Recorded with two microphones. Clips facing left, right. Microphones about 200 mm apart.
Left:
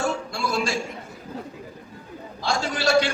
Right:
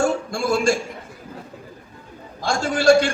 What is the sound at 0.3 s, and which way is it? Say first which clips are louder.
Speech: right 6 dB; 50° right (ahead or behind).